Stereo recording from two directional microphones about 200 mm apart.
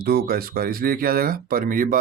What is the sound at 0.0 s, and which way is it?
Speech, 50° right (ahead or behind).